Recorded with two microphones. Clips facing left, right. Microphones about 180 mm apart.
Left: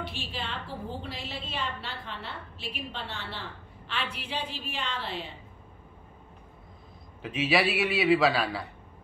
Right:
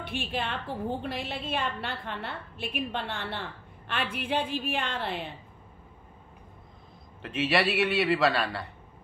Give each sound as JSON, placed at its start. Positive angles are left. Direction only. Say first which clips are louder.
{"t": 0.0, "sound": "a woman's voice", "louder": "right 4 dB", "side_deg": -55}
{"t": 7.2, "sound": "a man's voice", "louder": "even", "side_deg": 0}